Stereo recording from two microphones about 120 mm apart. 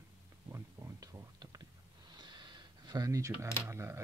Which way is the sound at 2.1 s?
40° right (ahead or behind).